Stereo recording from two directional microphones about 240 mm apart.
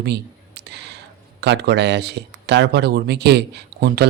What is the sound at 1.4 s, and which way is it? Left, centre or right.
Speech, right.